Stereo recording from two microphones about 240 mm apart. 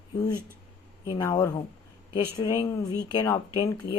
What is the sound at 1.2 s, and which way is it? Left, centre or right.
Speech, centre.